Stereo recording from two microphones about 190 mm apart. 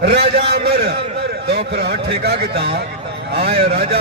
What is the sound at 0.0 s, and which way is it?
Speech, 65° right (ahead or behind).